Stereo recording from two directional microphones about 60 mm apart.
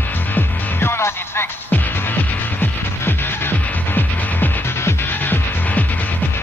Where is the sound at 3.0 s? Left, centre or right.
Left.